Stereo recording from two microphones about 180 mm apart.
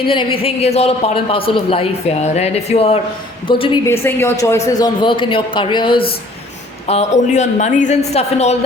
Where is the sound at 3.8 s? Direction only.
15° left (ahead or behind).